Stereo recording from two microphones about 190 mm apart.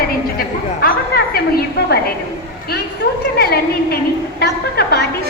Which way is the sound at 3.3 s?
55° left (ahead or behind).